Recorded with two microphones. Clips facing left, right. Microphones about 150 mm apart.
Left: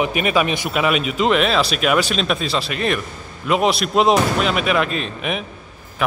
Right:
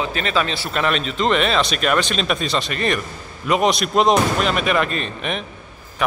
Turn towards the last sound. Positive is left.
turn(degrees=5)  # may be behind; listen again after turning